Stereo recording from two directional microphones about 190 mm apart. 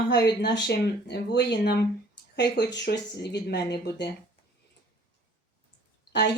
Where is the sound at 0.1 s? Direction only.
60° left (ahead or behind).